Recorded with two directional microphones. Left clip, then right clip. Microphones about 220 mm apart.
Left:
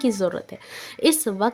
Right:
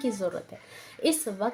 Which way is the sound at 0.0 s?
50° left (ahead or behind).